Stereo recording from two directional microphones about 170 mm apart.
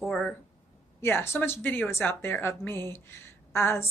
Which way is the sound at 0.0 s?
Centre (ahead or behind).